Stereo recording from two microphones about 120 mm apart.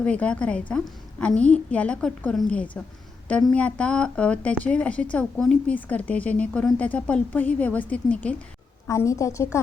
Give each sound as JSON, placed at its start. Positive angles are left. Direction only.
{"t": 0.0, "sound": "a woman's voice", "side_deg": 10}
{"t": 8.9, "sound": "a woman's voice", "side_deg": 25}